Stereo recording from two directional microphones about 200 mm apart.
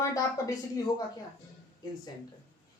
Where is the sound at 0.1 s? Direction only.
15° left (ahead or behind).